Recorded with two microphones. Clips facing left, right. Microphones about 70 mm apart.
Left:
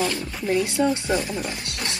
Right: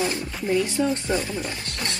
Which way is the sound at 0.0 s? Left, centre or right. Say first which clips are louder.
Left 1 dB; right.